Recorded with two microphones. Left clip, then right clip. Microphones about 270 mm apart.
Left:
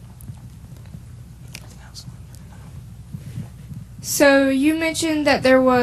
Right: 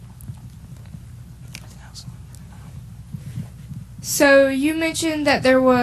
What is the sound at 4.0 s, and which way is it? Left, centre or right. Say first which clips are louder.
A woman's voice: right 1 dB; centre.